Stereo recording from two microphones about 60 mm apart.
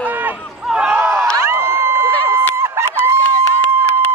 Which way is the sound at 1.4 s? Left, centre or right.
Right.